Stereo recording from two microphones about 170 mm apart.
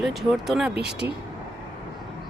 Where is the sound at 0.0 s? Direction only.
Centre (ahead or behind).